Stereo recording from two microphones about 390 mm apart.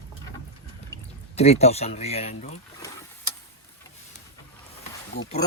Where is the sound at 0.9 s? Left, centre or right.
Centre.